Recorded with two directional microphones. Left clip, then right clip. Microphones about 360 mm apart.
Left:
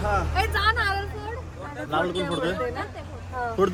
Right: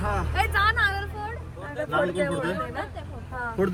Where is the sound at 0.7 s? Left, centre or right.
Right.